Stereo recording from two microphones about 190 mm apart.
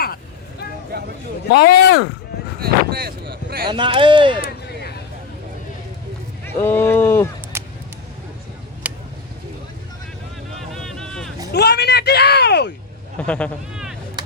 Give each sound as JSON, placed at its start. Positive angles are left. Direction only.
{"t": 1.5, "sound": "speech", "side_deg": 60}
{"t": 2.6, "sound": "speech", "side_deg": -55}
{"t": 3.7, "sound": "speech", "side_deg": -25}
{"t": 6.4, "sound": "speech", "side_deg": 10}
{"t": 7.5, "sound": "a sound", "side_deg": -15}
{"t": 8.8, "sound": "a sound", "side_deg": -10}
{"t": 10.8, "sound": "vehicle", "side_deg": 5}
{"t": 11.5, "sound": "speech", "side_deg": 60}
{"t": 13.1, "sound": "speech", "side_deg": 5}